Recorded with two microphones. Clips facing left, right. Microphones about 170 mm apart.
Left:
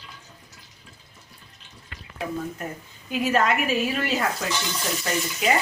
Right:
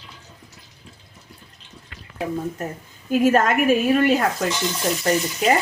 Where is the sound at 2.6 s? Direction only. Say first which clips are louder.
Right 4 dB; 40° right (ahead or behind).